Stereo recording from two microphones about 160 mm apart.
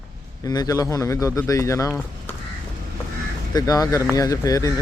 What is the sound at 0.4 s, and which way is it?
Speech, 25° left (ahead or behind).